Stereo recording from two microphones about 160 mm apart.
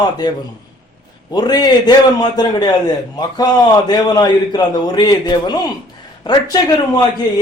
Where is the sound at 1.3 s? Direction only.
25° left (ahead or behind).